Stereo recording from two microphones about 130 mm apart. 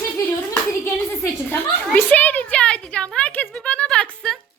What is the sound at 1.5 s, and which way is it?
Speech, 15° left (ahead or behind).